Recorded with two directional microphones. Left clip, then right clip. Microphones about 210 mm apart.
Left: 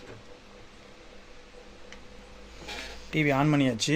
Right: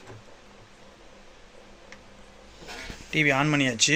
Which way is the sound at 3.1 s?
10° left (ahead or behind).